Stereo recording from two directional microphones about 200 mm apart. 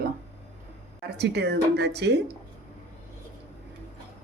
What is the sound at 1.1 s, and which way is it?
Speech, 55° right (ahead or behind).